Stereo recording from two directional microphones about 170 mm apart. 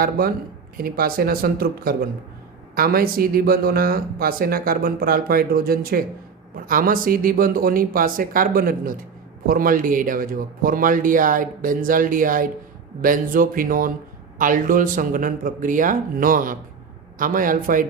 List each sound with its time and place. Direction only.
0.0 s speech: 60° right (ahead or behind)